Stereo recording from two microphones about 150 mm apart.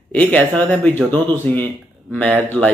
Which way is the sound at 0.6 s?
10° left (ahead or behind).